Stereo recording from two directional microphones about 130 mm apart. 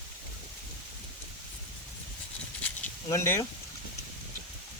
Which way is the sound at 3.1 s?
20° left (ahead or behind).